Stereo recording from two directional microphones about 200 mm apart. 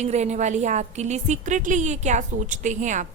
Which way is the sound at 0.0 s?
35° right (ahead or behind).